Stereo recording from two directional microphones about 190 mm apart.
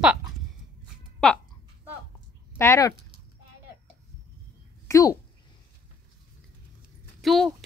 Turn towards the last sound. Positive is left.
turn(degrees=0)  # may be behind; listen again after turning